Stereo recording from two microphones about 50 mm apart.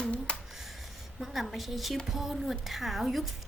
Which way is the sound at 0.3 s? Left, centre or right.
Left.